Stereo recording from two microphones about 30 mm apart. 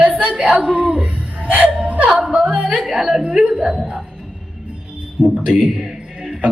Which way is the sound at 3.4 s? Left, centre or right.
Centre.